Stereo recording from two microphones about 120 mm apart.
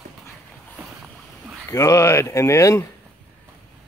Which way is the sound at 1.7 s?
25° left (ahead or behind).